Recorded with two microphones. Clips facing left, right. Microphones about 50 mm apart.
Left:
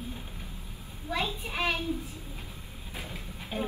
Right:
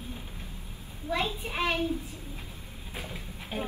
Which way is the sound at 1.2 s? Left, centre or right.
Right.